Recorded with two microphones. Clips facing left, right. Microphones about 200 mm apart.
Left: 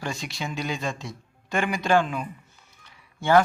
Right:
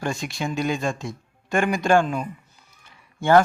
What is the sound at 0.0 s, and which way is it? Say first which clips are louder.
Speech: right 5 dB; 50° right (ahead or behind).